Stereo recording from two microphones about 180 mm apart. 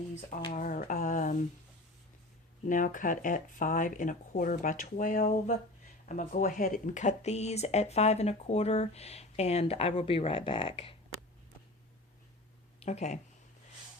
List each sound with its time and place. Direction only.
0.5 s speech: 45° left (ahead or behind)
2.6 s speech: 45° left (ahead or behind); by 10.9 s 30° left (ahead or behind)
12.8 s speech: 40° left (ahead or behind)